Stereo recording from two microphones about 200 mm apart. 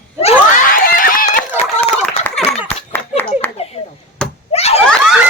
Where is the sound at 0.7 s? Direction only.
45° left (ahead or behind).